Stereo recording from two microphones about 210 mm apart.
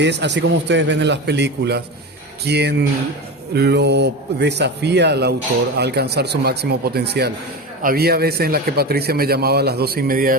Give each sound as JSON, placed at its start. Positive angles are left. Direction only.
{"t": 0.0, "sound": "a man's voice", "side_deg": -55}